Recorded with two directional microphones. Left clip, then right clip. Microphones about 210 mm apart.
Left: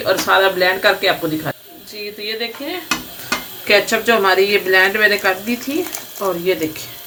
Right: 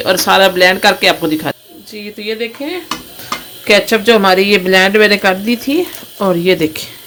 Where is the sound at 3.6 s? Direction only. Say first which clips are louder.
Right 5 dB; 45° right (ahead or behind).